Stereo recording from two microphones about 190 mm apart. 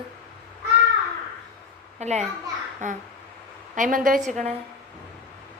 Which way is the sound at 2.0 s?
35° right (ahead or behind).